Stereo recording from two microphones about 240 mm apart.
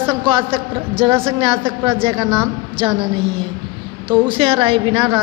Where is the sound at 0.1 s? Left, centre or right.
Right.